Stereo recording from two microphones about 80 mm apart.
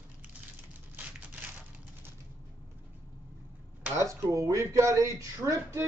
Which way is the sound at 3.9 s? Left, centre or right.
Right.